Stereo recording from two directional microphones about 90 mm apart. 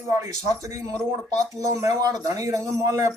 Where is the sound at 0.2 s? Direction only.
40° right (ahead or behind).